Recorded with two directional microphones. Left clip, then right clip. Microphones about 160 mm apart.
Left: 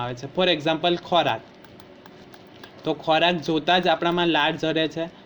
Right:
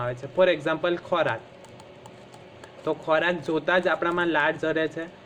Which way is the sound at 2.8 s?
35° left (ahead or behind).